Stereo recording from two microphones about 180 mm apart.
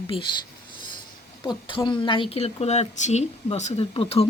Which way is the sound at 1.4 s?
25° left (ahead or behind).